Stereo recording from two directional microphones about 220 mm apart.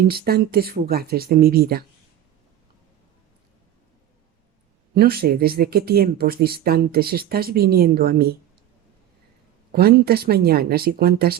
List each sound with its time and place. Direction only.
0.1 s speech: 45° right (ahead or behind)
4.9 s speech: 45° right (ahead or behind)
9.7 s speech: 45° right (ahead or behind)